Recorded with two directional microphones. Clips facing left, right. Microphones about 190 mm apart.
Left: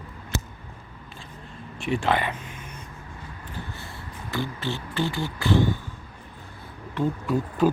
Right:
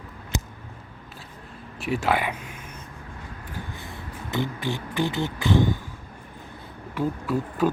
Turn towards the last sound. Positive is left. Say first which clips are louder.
# left 2 dB
turn(degrees=0)  # may be behind; listen again after turning